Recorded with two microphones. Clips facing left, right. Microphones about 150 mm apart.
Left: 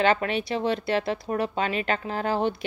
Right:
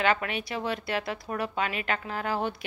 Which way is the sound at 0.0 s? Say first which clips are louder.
Left 4 dB; 30° left (ahead or behind).